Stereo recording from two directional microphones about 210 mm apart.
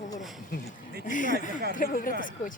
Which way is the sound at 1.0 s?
40° left (ahead or behind).